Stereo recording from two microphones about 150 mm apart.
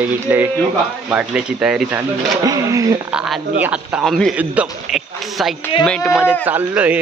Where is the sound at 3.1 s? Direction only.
5° right (ahead or behind).